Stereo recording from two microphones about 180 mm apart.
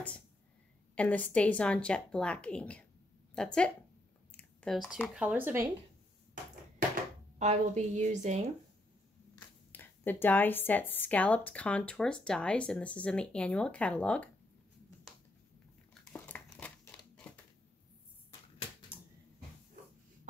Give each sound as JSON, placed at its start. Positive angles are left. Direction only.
{"t": 0.9, "sound": "speech", "side_deg": 5}
{"t": 7.3, "sound": "a woman's voice", "side_deg": -40}
{"t": 9.7, "sound": "speech", "side_deg": 10}
{"t": 15.9, "sound": "crumpling", "side_deg": 5}